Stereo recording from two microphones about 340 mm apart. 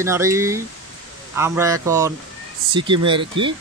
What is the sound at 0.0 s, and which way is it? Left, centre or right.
Speech, centre.